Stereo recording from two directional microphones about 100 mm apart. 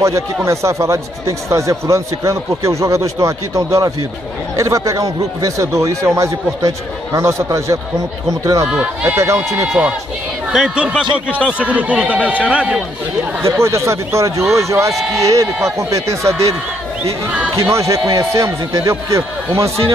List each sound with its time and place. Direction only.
0.0 s speech: 30° right (ahead or behind)
8.6 s a man's voice: 10° right (ahead or behind)
9.2 s speech: 25° right (ahead or behind)
9.7 s a man's voice: 10° right (ahead or behind)
13.4 s speech: 30° right (ahead or behind)
17.6 s speech: 30° right (ahead or behind)